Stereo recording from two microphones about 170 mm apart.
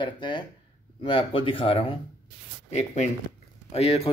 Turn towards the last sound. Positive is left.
turn(degrees=35)  # may be behind; listen again after turning